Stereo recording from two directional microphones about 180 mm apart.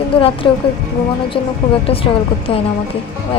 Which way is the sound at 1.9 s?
30° left (ahead or behind).